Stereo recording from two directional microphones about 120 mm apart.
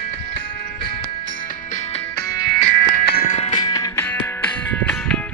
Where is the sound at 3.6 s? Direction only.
30° left (ahead or behind).